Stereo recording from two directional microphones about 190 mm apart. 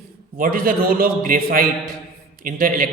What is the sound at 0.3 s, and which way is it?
A man's voice, 50° right (ahead or behind).